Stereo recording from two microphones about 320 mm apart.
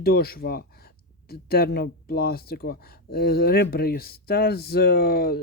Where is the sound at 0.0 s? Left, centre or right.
Left.